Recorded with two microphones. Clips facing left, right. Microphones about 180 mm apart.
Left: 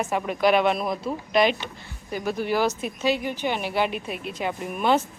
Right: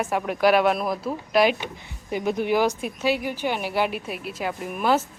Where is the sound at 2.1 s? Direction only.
20° right (ahead or behind).